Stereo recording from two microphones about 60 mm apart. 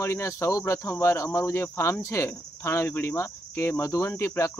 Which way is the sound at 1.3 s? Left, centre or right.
Left.